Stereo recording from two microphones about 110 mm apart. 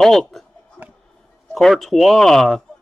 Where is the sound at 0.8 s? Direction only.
35° right (ahead or behind).